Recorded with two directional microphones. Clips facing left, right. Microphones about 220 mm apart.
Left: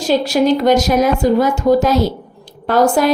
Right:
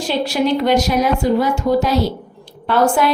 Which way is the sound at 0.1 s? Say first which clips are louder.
Left 4 dB; 40° left (ahead or behind).